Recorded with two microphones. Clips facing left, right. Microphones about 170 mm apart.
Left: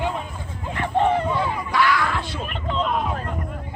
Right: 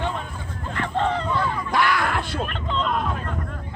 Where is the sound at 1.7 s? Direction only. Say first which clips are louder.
Left 1 dB; 55° right (ahead or behind).